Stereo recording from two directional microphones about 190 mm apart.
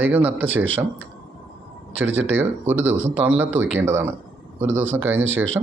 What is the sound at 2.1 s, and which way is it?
Speech, 80° right.